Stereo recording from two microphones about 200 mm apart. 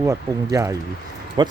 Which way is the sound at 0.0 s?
15° right (ahead or behind).